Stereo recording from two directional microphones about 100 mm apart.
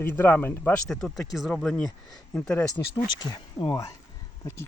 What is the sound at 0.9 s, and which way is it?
Speech, 5° left (ahead or behind).